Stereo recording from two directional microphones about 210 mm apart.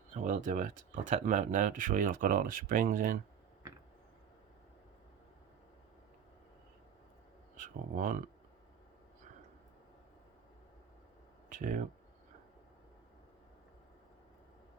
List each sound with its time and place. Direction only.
0.1 s speech: 35° right (ahead or behind)
7.5 s speech: 40° right (ahead or behind)
11.4 s speech: 40° right (ahead or behind)